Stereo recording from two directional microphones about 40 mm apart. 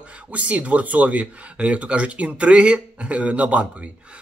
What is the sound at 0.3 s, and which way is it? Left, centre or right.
Speech, right.